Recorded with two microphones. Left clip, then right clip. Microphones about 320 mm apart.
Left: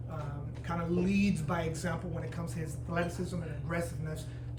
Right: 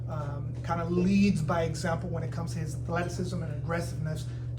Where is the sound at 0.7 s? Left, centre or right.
Centre.